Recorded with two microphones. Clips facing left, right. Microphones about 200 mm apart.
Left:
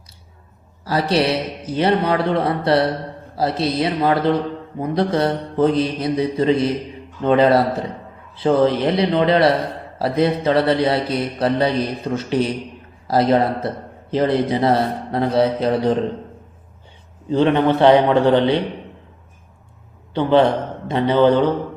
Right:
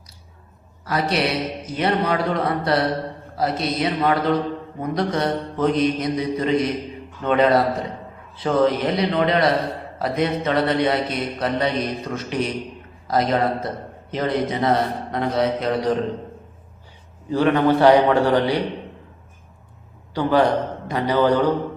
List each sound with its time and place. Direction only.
0.9 s a man's voice: 30° left (ahead or behind)
4.8 s mantra: 30° left (ahead or behind)
7.2 s a man's voice: 30° left (ahead or behind)
10.0 s mantra: 30° left (ahead or behind)
17.2 s a man's voice: 25° left (ahead or behind)
20.1 s a man's voice: 25° left (ahead or behind)